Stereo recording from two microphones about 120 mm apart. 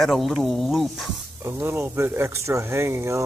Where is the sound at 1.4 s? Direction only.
20° right (ahead or behind).